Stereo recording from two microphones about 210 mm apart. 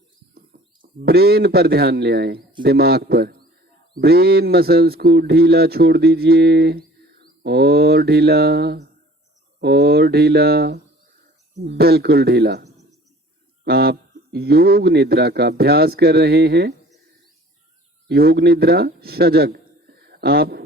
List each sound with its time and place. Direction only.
0.3 s a man's voice: 45° right (ahead or behind)
13.7 s speech: 50° right (ahead or behind)
18.1 s speech: 50° right (ahead or behind)